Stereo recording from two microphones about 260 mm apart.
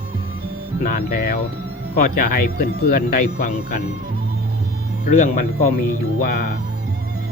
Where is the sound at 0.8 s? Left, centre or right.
Left.